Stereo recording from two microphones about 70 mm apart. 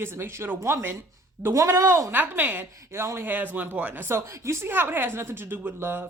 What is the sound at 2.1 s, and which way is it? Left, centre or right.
A woman's voice, right.